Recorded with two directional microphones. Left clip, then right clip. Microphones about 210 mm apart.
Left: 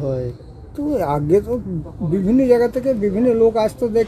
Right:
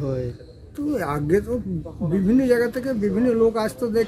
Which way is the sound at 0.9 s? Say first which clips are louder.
Left 5 dB; 10° right (ahead or behind).